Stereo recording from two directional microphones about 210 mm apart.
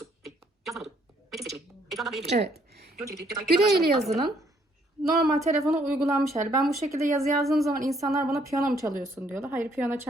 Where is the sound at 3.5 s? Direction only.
45° right (ahead or behind).